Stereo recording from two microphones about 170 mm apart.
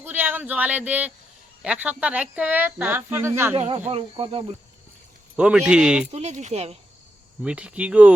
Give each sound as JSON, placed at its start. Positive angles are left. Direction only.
{"t": 0.0, "sound": "speech", "side_deg": -10}
{"t": 3.5, "sound": "speech", "side_deg": -40}
{"t": 5.4, "sound": "speech", "side_deg": -5}
{"t": 6.1, "sound": "speech", "side_deg": -40}
{"t": 7.4, "sound": "speech", "side_deg": -5}